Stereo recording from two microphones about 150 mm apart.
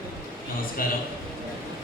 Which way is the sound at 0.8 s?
70° left (ahead or behind).